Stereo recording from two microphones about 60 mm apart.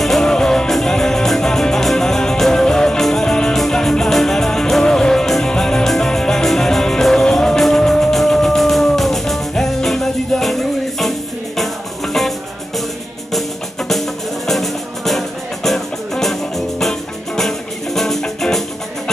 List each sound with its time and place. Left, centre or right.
0.0 s music: centre